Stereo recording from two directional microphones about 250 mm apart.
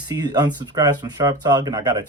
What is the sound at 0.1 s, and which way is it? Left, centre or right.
Speech, centre.